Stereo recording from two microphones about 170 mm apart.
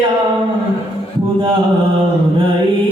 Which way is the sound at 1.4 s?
30° right (ahead or behind).